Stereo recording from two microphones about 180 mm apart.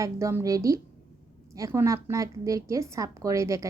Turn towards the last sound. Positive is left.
turn(degrees=-15)  # may be behind; listen again after turning